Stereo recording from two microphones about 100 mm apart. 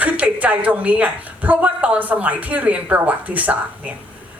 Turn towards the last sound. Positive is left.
turn(degrees=-15)  # may be behind; listen again after turning